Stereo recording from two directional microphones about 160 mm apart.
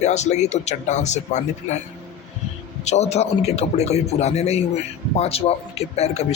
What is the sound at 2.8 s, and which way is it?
A man's voice, 45° left (ahead or behind).